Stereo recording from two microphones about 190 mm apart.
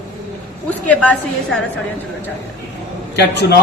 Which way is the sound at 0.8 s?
5° left (ahead or behind).